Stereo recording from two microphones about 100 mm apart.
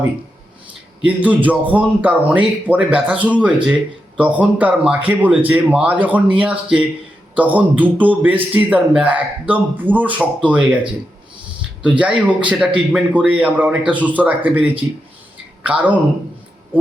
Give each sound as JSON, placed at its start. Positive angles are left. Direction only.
{"t": 1.0, "sound": "a man's voice", "side_deg": -15}
{"t": 11.9, "sound": "a man's voice", "side_deg": -10}